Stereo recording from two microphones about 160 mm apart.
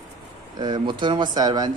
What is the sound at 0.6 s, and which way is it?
Speech, 30° right (ahead or behind).